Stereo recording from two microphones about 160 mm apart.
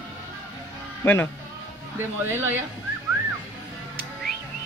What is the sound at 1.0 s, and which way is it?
Speech, 15° left (ahead or behind).